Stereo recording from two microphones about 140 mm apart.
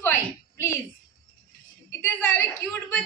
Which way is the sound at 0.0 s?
15° left (ahead or behind).